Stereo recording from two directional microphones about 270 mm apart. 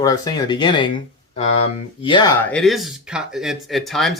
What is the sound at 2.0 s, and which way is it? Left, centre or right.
Speech, centre.